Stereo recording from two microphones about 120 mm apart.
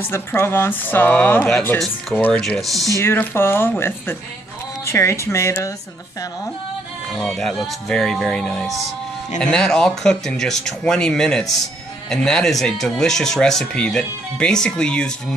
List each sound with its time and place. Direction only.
0.1 s speech: 20° left (ahead or behind)
1.8 s speech: centre (ahead or behind)
3.0 s speech: 20° left (ahead or behind)
5.2 s speech: 20° left (ahead or behind)
7.2 s speech: centre (ahead or behind)